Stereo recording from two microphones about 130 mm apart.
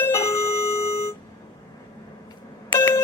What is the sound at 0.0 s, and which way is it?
Doorbell, 20° left (ahead or behind).